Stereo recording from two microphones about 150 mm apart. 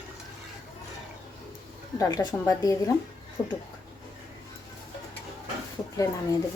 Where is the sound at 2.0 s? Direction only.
20° left (ahead or behind).